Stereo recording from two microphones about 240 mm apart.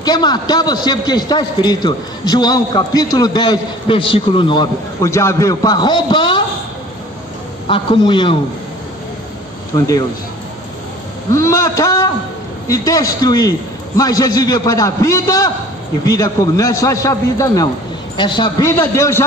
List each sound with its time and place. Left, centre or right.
0.0 s a man's voice: centre
7.6 s a man's voice: left
9.8 s a man's voice: centre
11.3 s a sound: centre
12.6 s a man's voice: centre